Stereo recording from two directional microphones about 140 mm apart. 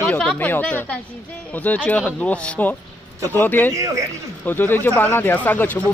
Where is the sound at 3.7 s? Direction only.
25° right (ahead or behind).